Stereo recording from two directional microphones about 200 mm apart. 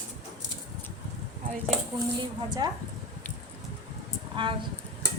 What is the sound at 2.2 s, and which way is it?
Speech, 20° right (ahead or behind).